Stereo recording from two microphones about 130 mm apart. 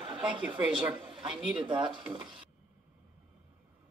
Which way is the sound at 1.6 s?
40° right (ahead or behind).